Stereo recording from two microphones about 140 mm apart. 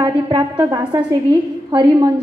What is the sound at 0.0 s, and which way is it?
A woman's voice, 30° right (ahead or behind).